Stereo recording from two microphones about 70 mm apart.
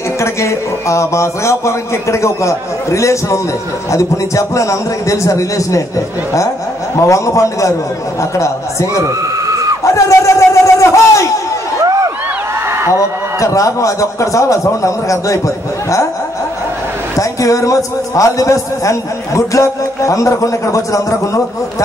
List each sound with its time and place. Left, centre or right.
0.2 s a man's voice: left
7.0 s a man's voice: left
9.8 s chatter: left
12.6 s a sound: right
13.4 s a man's voice: left
17.2 s a man's voice: left